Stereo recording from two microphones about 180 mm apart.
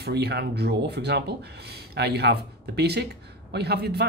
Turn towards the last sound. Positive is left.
turn(degrees=-65)  # may be behind; listen again after turning